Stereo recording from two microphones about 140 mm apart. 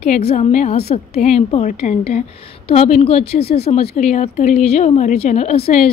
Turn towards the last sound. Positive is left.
turn(degrees=55)  # may be behind; listen again after turning